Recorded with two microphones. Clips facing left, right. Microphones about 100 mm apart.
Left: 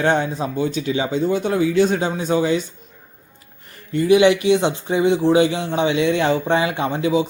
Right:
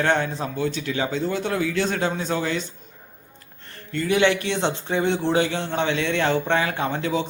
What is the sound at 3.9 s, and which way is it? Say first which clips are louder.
A man's voice: left 6 dB; 15° left (ahead or behind).